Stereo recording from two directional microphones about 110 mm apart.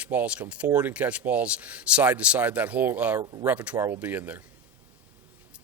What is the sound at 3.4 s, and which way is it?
Speech, 10° right (ahead or behind).